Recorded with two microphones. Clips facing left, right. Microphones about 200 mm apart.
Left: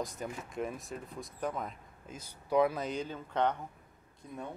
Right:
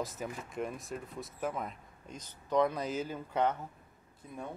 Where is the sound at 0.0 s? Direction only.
Centre (ahead or behind).